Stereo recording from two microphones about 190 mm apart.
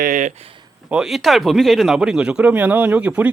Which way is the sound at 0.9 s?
5° right (ahead or behind).